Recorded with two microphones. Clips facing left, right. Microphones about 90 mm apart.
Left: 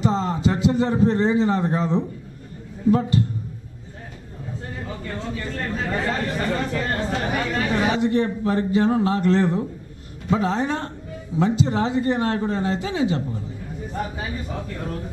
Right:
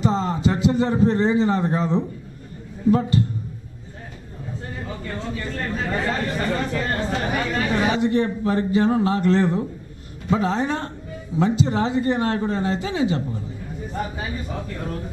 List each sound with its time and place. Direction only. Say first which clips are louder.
0.0 s a man's voice: even; 15° right (ahead or behind)
4.7 s speech: even; 15° right (ahead or behind)